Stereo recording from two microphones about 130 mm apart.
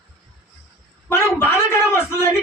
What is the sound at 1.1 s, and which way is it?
Speech, 20° left (ahead or behind).